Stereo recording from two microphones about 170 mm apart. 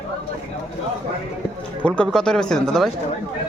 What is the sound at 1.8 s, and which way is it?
A man's voice, 5° left (ahead or behind).